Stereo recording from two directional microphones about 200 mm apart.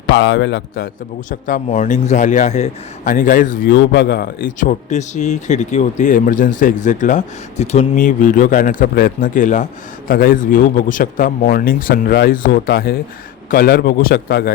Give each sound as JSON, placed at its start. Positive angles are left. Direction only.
{"t": 0.1, "sound": "a man's voice", "side_deg": 65}
{"t": 1.3, "sound": "speech", "side_deg": 40}
{"t": 3.7, "sound": "speech", "side_deg": 60}